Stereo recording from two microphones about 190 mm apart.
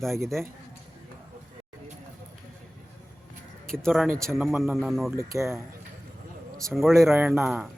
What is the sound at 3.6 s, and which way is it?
Speech, 5° left (ahead or behind).